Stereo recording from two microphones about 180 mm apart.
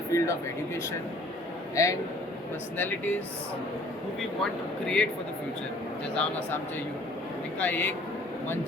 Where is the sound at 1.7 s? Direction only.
20° left (ahead or behind).